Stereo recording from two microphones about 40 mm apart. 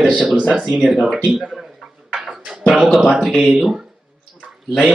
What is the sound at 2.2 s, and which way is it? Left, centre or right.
Music, centre.